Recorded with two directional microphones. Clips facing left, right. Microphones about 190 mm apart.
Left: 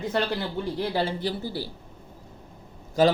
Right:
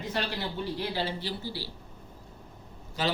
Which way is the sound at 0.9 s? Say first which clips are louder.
Left 6 dB; 50° left (ahead or behind).